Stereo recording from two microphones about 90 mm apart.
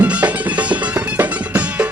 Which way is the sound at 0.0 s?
15° right (ahead or behind).